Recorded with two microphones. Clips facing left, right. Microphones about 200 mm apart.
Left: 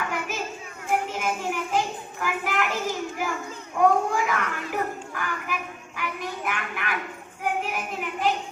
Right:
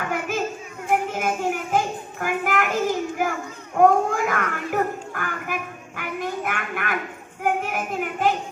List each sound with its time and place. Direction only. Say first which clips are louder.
0.1 s children playing: right 5 dB; 50° right (ahead or behind)
1.1 s child singing: right 4 dB; 50° right (ahead or behind)
3.8 s dog: right 4 dB; 50° right (ahead or behind)
6.0 s a sound: right 4 dB; 50° right (ahead or behind)
7.4 s child singing: right 4 dB; 50° right (ahead or behind)